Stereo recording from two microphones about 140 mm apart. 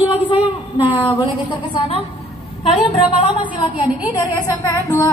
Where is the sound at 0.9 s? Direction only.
35° left (ahead or behind).